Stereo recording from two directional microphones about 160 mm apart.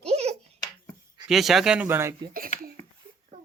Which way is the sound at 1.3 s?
Centre (ahead or behind).